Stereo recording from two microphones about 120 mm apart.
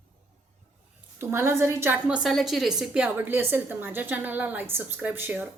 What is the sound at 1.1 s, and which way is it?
Speech, 20° right (ahead or behind).